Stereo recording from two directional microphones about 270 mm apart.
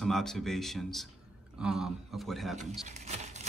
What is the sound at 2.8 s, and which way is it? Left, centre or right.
Patter, right.